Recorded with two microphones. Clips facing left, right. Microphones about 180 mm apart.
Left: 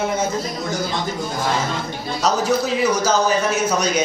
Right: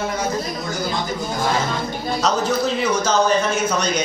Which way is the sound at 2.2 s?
10° left (ahead or behind).